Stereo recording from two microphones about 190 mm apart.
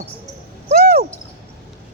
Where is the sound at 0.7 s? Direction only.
55° right (ahead or behind).